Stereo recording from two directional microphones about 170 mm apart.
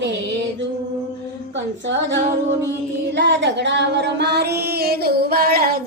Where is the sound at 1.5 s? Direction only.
90° right.